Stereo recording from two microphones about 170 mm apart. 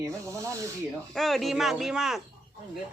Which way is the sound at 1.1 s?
Centre (ahead or behind).